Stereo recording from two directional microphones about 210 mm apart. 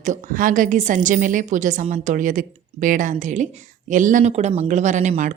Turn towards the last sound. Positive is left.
turn(degrees=-35)  # may be behind; listen again after turning